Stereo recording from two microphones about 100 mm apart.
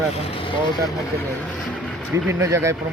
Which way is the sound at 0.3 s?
65° left (ahead or behind).